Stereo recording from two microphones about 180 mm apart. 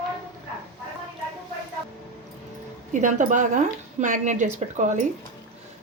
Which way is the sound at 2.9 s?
45° right (ahead or behind).